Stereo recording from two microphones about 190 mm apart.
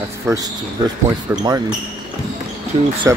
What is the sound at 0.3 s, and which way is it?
Speech, 20° right (ahead or behind).